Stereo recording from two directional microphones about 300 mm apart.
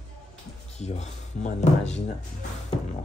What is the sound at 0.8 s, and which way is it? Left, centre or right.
Speech, left.